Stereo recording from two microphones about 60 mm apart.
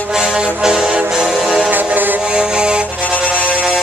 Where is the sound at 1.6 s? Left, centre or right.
Right.